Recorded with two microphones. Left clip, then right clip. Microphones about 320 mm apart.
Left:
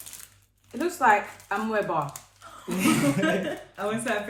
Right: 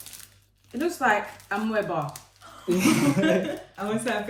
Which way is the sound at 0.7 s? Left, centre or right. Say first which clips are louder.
Left 2 dB; centre.